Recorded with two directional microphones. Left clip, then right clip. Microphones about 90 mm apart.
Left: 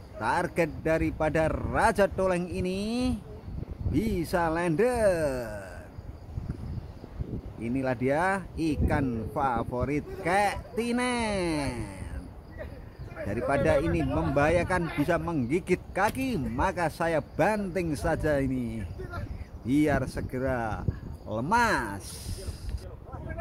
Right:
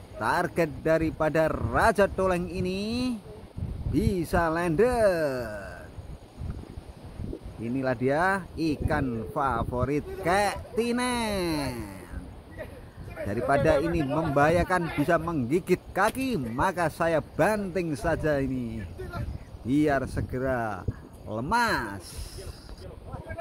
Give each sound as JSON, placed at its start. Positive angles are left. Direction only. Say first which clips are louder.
{"t": 0.2, "sound": "a man's voice", "louder": "right 1 dB", "side_deg": -40}
{"t": 7.6, "sound": "a man's voice", "louder": "right 1 dB", "side_deg": -35}
{"t": 13.5, "sound": "a man's voice", "louder": "right 2 dB", "side_deg": -40}
{"t": 17.8, "sound": "a man's voice", "louder": "right 1 dB", "side_deg": -25}